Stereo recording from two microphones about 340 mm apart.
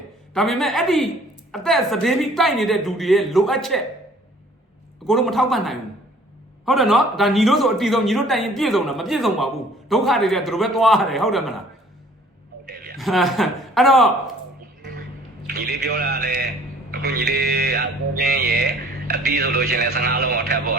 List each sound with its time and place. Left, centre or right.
0.3 s a man's voice: centre
5.0 s a man's voice: centre
12.6 s a sound: right
13.0 s a man's voice: centre
15.4 s speech: right